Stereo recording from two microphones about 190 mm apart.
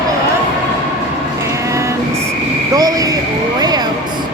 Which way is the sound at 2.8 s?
20° right (ahead or behind).